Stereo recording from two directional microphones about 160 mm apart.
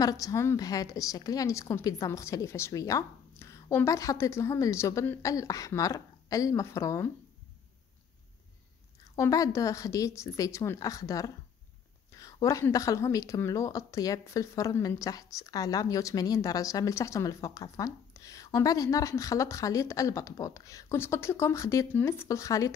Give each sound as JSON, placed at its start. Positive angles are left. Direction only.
{"t": 0.0, "sound": "speech", "side_deg": 20}
{"t": 9.0, "sound": "speech", "side_deg": 20}